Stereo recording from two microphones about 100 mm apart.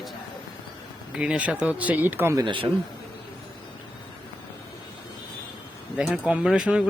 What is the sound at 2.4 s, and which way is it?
Speech, 60° right (ahead or behind).